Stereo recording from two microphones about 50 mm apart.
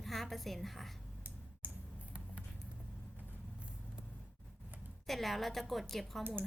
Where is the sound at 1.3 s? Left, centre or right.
Right.